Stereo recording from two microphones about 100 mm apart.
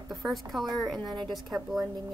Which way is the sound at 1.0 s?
45° right (ahead or behind).